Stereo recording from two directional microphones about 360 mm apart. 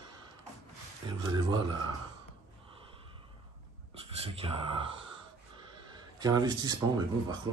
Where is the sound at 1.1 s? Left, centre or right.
Centre.